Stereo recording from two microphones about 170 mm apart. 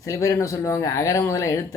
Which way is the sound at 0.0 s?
20° left (ahead or behind).